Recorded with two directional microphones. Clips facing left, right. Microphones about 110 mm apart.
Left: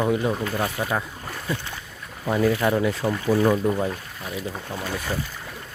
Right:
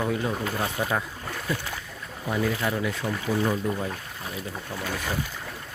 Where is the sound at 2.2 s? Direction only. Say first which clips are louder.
Left 6 dB; 60° left (ahead or behind).